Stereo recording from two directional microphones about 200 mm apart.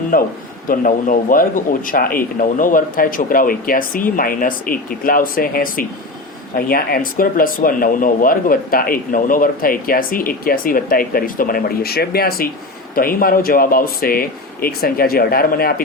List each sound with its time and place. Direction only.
0.1 s speech: 45° left (ahead or behind)